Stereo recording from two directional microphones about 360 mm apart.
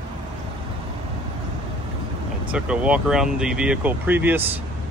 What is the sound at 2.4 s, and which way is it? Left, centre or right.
Speech, centre.